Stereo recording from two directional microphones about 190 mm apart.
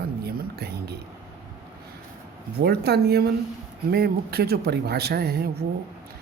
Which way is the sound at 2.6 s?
55° right (ahead or behind).